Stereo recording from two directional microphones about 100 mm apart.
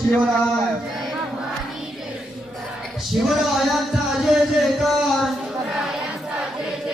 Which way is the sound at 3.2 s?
Centre (ahead or behind).